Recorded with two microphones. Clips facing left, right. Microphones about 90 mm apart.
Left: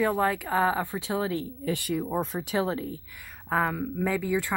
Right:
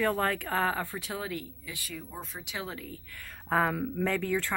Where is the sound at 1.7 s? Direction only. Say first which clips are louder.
Left 13 dB; 60° left (ahead or behind).